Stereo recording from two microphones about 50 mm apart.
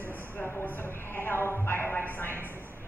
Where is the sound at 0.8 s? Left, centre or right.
Left.